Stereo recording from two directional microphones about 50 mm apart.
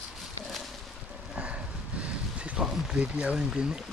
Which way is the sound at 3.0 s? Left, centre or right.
Right.